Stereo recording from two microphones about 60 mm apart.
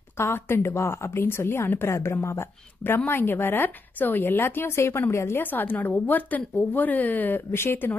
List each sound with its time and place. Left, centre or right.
0.2 s a woman's voice: left
3.1 s a woman's voice: left
5.4 s a woman's voice: left